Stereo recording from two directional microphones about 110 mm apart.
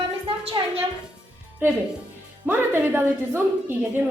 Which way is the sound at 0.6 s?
45° right (ahead or behind).